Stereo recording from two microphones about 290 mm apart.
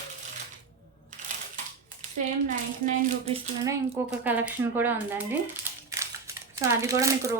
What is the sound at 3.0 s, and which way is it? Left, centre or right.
Speech, right.